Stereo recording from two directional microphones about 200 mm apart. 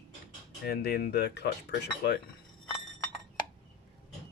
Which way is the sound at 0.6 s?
50° left (ahead or behind).